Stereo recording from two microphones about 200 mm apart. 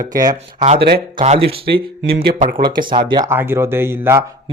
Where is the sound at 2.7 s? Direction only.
25° right (ahead or behind).